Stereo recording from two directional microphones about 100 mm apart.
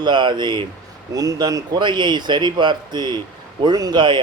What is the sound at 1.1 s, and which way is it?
Speech, 35° right (ahead or behind).